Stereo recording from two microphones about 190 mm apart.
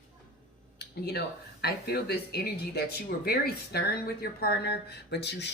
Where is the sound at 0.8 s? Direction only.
60° left (ahead or behind).